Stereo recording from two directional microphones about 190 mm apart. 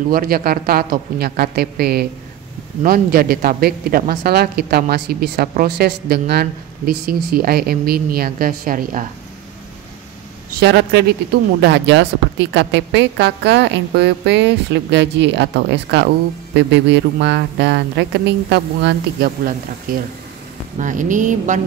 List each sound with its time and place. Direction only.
0.1 s speech: 50° right (ahead or behind)
10.6 s a woman's voice: 65° right (ahead or behind)
20.8 s speech: 40° right (ahead or behind)